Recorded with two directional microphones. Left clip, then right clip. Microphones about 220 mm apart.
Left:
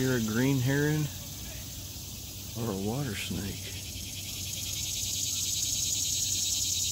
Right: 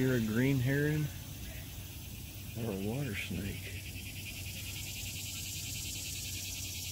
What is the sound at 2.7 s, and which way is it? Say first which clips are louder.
Speech: left 4 dB; 10° left (ahead or behind).